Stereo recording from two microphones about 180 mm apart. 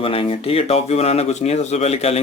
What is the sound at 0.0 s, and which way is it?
Speech, 30° left (ahead or behind).